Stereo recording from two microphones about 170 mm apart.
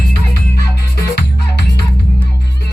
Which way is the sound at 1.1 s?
80° left.